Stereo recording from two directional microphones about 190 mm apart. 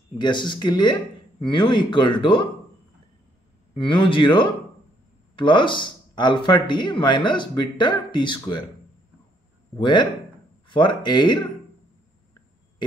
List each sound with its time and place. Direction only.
0.2 s speech: 25° left (ahead or behind)
3.7 s speech: 25° left (ahead or behind)
9.8 s speech: 25° left (ahead or behind)